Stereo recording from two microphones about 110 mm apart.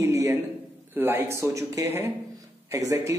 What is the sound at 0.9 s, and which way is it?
Speech, 20° right (ahead or behind).